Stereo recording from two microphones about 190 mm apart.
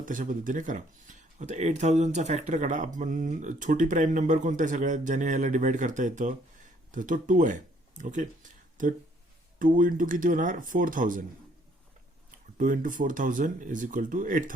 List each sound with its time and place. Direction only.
0.0 s speech: 45° right (ahead or behind)
12.5 s speech: 45° right (ahead or behind)